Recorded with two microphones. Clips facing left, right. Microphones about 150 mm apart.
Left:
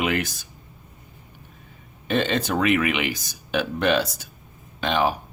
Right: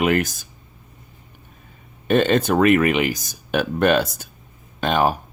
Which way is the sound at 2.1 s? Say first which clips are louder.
Right 6 dB; 50° right (ahead or behind).